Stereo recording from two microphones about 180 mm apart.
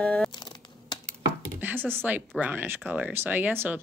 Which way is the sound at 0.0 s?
5° left (ahead or behind).